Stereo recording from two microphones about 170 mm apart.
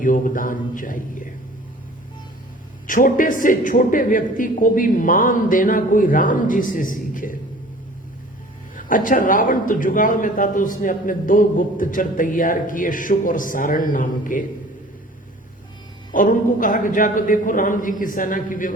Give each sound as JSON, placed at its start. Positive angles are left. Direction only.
{"t": 0.0, "sound": "a man's voice", "side_deg": 50}
{"t": 2.8, "sound": "a man's voice", "side_deg": 55}
{"t": 8.7, "sound": "a man's voice", "side_deg": 55}
{"t": 16.1, "sound": "a man's voice", "side_deg": 55}